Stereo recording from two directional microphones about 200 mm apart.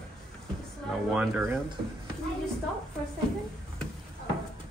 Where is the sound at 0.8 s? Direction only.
5° right (ahead or behind).